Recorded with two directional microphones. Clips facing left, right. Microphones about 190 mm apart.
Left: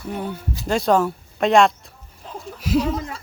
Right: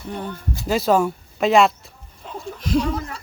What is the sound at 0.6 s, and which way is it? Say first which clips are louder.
Speech: even; 5° right (ahead or behind).